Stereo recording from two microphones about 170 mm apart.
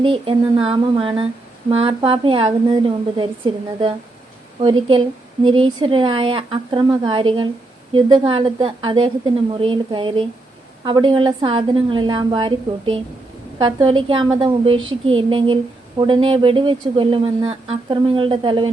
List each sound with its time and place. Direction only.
0.0 s a woman's voice: 30° right (ahead or behind)